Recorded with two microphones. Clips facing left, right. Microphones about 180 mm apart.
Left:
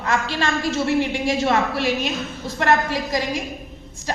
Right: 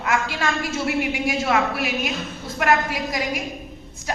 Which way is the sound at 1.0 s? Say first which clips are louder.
Left 3 dB; 30° left (ahead or behind).